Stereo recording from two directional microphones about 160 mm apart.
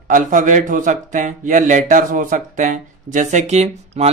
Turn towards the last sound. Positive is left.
turn(degrees=-45)  # may be behind; listen again after turning